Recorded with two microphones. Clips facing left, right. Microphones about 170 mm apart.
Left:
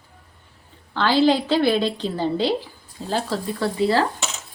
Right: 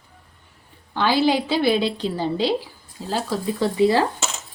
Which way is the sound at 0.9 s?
15° right (ahead or behind).